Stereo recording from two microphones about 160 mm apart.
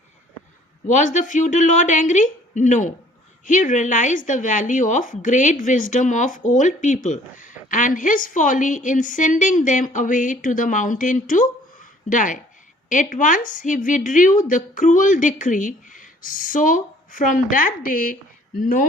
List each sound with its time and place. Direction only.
0.9 s a woman's voice: 50° left (ahead or behind)